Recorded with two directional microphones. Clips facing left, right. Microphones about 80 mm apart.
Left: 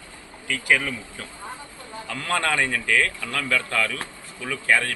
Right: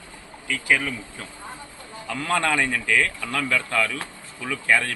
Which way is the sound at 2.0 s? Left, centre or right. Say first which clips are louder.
Right 2 dB; centre.